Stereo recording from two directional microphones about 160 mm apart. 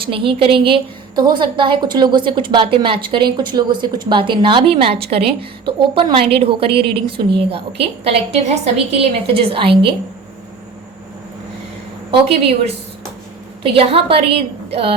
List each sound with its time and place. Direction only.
0.0 s a woman's voice: 35° right (ahead or behind)
12.1 s a woman's voice: 40° right (ahead or behind)